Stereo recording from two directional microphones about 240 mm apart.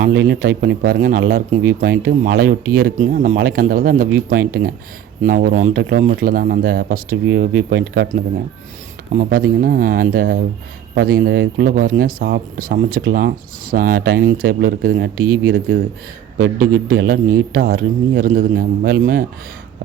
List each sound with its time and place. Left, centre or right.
0.0 s speech: right
7.3 s speech: right
9.1 s speech: right
16.4 s speech: right